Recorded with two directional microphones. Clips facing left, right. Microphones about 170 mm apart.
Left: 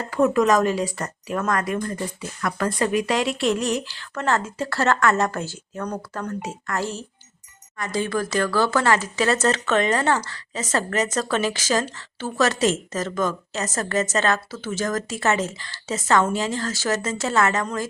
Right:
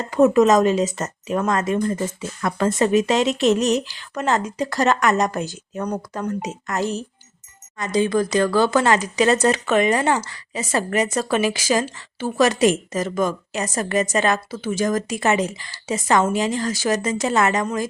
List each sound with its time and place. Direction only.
0.0 s a woman's voice: 20° right (ahead or behind)